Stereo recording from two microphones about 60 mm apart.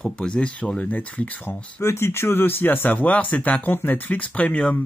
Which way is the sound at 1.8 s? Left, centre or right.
Left.